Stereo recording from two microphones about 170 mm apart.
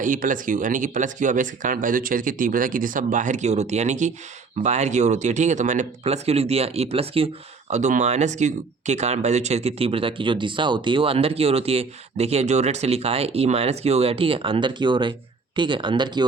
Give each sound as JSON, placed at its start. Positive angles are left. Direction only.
{"t": 0.0, "sound": "speech", "side_deg": -50}